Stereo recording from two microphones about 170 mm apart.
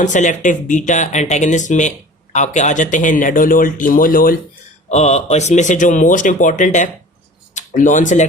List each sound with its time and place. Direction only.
0.0 s speech: 45° left (ahead or behind)
4.9 s speech: 40° left (ahead or behind)